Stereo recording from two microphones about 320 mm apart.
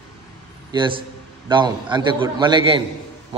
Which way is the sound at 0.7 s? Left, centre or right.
Centre.